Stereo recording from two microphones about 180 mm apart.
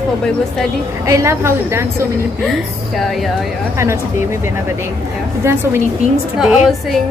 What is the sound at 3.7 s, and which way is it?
A woman's voice, 15° right (ahead or behind).